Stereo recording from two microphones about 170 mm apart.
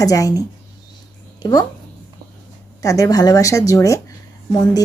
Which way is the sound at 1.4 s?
25° left (ahead or behind).